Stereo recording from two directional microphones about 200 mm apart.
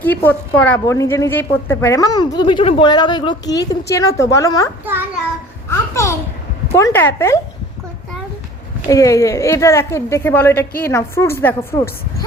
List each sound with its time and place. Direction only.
0.0 s a woman's voice: 10° left (ahead or behind)
5.6 s a sound: 15° left (ahead or behind)
6.7 s a woman's voice: 15° left (ahead or behind)
8.9 s a woman's voice: 15° left (ahead or behind)